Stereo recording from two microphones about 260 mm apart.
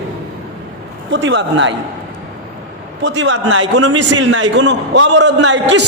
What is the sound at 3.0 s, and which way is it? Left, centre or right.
A man's voice, right.